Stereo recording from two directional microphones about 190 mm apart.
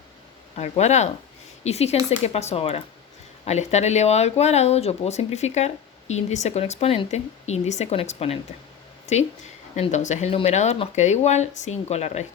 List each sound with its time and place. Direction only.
0.5 s speech: 35° left (ahead or behind)